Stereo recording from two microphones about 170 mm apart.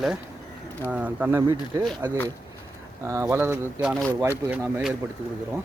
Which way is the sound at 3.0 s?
15° right (ahead or behind).